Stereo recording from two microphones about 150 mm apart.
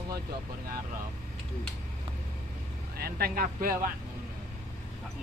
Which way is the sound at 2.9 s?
90° right.